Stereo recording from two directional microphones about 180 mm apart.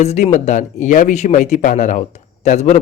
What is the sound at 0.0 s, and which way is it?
A man's voice, 40° left (ahead or behind).